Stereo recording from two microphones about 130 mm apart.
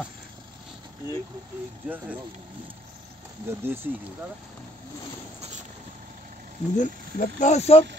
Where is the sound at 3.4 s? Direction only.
20° right (ahead or behind).